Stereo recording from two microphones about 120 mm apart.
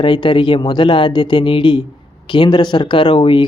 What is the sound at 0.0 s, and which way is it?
A man's voice, 40° left (ahead or behind).